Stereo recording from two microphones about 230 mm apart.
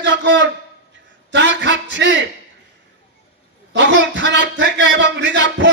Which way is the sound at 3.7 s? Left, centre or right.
Right.